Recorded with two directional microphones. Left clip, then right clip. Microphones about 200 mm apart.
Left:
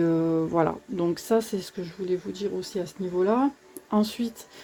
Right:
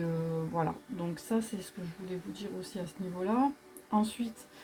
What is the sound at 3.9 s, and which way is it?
Speech, 50° left (ahead or behind).